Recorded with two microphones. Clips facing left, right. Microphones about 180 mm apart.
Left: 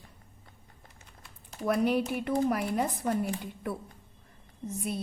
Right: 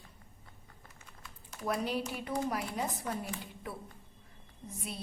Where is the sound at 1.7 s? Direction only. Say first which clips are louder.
Left 7 dB; 60° left (ahead or behind).